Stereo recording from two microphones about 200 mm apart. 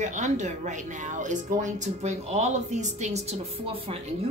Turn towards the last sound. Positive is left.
turn(degrees=-35)  # may be behind; listen again after turning